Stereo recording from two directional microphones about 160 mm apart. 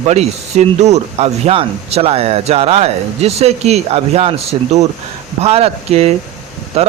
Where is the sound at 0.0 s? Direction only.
45° right (ahead or behind).